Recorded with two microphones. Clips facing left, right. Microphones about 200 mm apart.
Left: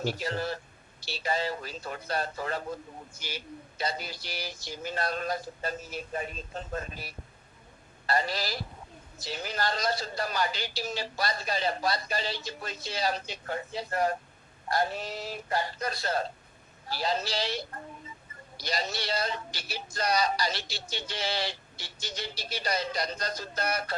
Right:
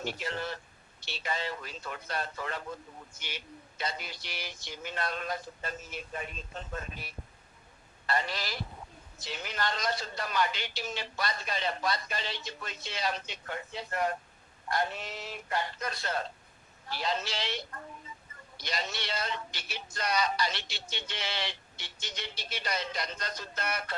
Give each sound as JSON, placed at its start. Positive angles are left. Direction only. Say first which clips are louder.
{"t": 0.0, "sound": "speech", "louder": "left 4 dB", "side_deg": 35}